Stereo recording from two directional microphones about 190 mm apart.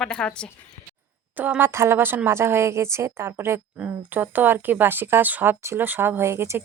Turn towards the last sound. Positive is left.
turn(degrees=-15)  # may be behind; listen again after turning